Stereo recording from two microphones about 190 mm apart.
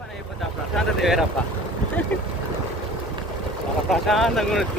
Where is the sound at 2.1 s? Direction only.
10° left (ahead or behind).